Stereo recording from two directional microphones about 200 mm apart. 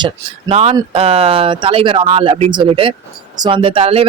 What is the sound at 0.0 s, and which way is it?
Speech, 30° right (ahead or behind).